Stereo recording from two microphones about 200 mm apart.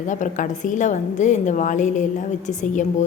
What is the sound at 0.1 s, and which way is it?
A woman's voice, 40° left (ahead or behind).